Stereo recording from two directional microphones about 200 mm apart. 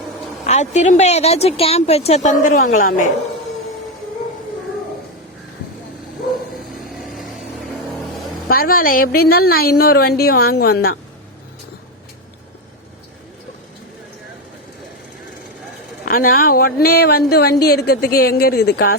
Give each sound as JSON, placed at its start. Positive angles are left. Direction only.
{"t": 0.4, "sound": "speech", "side_deg": 35}
{"t": 7.0, "sound": "vehicle", "side_deg": 0}
{"t": 8.4, "sound": "a woman's voice", "side_deg": 45}
{"t": 16.0, "sound": "a woman's voice", "side_deg": 45}